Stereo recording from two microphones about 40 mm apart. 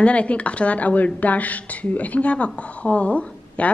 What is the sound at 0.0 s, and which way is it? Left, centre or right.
A woman's voice, left.